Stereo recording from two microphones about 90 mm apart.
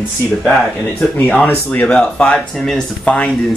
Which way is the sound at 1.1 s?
15° left (ahead or behind).